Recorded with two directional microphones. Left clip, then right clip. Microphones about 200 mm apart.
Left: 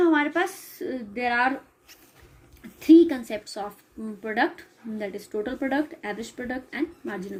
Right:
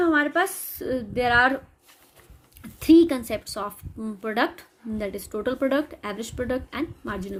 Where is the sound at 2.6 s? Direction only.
55° right (ahead or behind).